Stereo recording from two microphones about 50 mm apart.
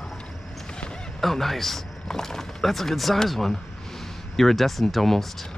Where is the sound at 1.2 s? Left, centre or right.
Centre.